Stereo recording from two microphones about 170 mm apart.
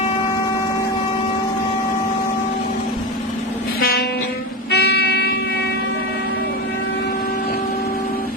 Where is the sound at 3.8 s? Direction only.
65° left (ahead or behind).